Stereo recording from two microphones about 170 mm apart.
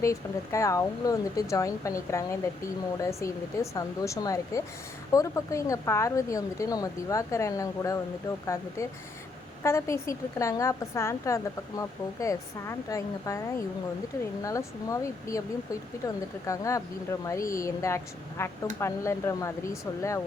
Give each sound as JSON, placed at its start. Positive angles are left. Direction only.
{"t": 0.0, "sound": "a woman's voice", "side_deg": 20}
{"t": 9.6, "sound": "a woman's voice", "side_deg": 15}
{"t": 14.4, "sound": "a woman's voice", "side_deg": 20}